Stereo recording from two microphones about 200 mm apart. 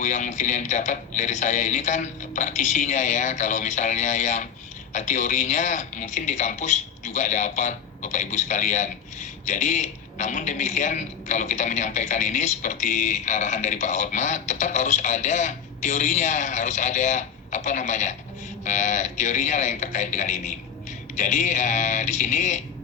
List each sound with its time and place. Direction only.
0.0 s a man's voice: 35° left (ahead or behind)